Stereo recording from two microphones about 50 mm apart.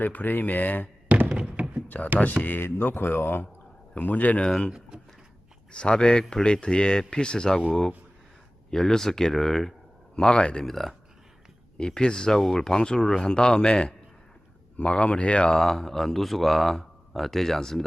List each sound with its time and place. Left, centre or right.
0.0 s speech: left
1.0 s music: right
1.4 s thunk: right
2.4 s speech: left
3.9 s speech: left
5.7 s speech: left
10.2 s speech: centre
10.7 s a man's voice: centre
12.4 s a man's voice: centre
12.6 s speech: centre
15.5 s a man's voice: centre